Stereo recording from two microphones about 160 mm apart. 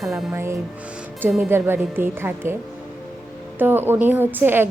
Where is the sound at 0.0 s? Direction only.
Centre (ahead or behind).